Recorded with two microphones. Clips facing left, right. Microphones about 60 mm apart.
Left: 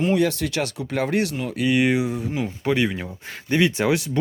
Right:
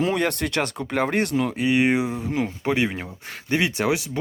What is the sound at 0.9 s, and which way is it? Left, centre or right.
Speech, right.